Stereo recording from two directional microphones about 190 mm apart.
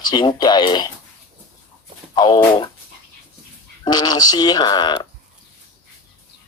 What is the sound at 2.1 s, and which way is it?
Speech, 25° left (ahead or behind).